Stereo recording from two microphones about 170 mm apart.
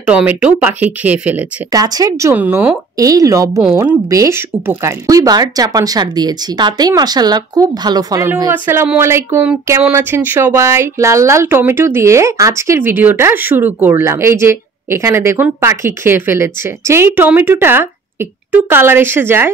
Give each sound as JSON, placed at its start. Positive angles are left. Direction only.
{"t": 0.0, "sound": "speech", "side_deg": -5}
{"t": 1.7, "sound": "speech", "side_deg": -20}